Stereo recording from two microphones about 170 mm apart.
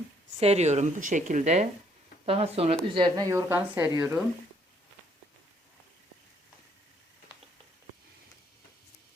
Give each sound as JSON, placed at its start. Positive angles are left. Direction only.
{"t": 0.3, "sound": "speech", "side_deg": -40}
{"t": 2.9, "sound": "speech", "side_deg": -25}